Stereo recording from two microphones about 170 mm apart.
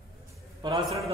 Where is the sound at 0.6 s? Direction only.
25° right (ahead or behind).